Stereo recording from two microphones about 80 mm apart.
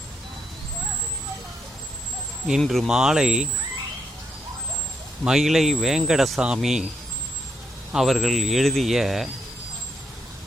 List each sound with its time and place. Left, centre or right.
2.6 s speech: centre
5.2 s speech: centre
7.9 s speech: centre